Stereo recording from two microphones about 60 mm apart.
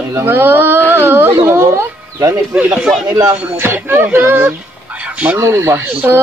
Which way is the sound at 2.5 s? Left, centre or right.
Centre.